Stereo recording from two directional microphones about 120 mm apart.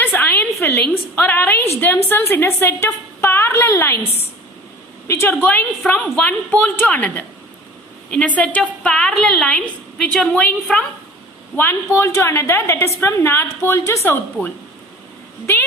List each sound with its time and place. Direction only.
0.0 s a woman's voice: 20° left (ahead or behind)
5.0 s a woman's voice: 20° left (ahead or behind)
11.5 s a woman's voice: 20° left (ahead or behind)